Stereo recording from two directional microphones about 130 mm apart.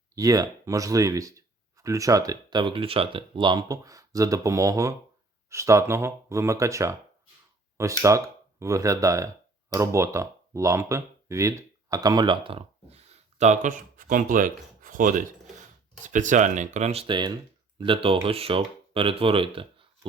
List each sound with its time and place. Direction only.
0.2 s speech: 30° right (ahead or behind); by 15.2 s 90° right
16.0 s speech: 75° right (ahead or behind); by 19.9 s 45° right (ahead or behind)